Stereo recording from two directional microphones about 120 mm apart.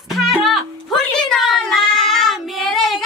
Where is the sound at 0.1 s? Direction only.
Centre (ahead or behind).